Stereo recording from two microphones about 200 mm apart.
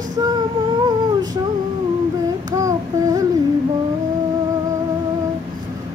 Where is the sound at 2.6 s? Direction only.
15° right (ahead or behind).